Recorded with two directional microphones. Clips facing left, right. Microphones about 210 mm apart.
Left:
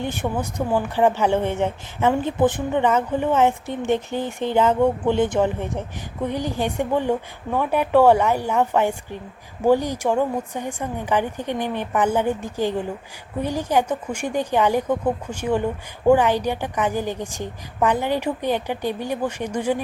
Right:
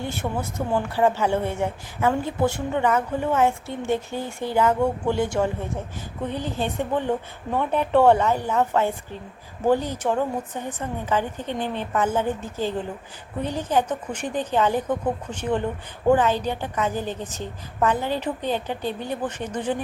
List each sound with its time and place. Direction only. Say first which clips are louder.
0.0 s a woman's voice: left 3 dB; 15° left (ahead or behind)